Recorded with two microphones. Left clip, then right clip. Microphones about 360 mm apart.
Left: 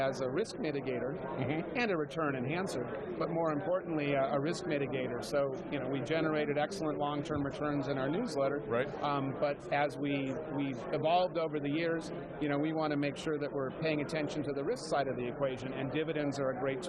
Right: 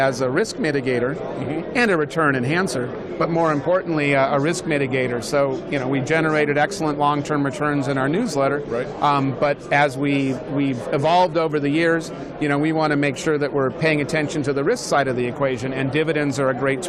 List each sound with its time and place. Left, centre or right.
0.0 s a man's voice: right